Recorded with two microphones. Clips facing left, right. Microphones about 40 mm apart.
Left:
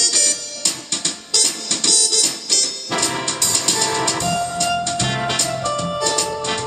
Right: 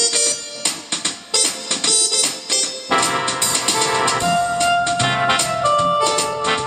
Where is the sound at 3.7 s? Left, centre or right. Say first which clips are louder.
Right 4 dB; right.